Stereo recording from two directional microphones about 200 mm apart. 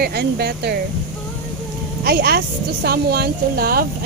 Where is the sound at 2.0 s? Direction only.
50° right (ahead or behind).